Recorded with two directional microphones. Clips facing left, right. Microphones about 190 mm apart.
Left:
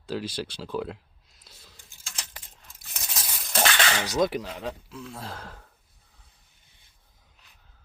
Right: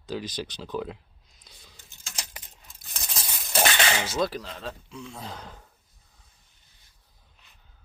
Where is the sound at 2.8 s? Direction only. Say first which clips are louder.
Even; 5° left (ahead or behind).